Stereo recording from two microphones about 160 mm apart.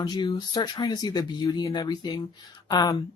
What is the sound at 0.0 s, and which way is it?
Speech, 25° left (ahead or behind).